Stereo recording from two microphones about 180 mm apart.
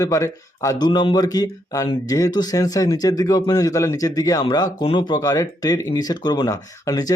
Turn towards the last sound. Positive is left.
turn(degrees=20)  # may be behind; listen again after turning